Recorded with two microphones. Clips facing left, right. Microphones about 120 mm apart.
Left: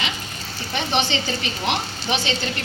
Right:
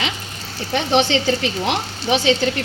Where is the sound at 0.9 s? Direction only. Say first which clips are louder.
Right 7 dB; 90° right.